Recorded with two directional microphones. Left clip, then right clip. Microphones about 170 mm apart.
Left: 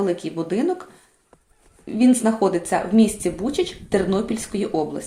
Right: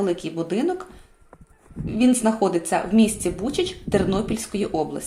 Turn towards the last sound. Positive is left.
turn(degrees=-15)  # may be behind; listen again after turning